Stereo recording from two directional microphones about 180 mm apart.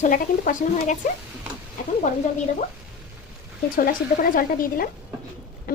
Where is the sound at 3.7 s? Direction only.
50° left (ahead or behind).